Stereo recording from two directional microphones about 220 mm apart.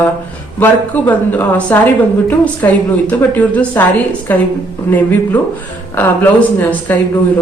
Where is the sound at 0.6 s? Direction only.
10° left (ahead or behind).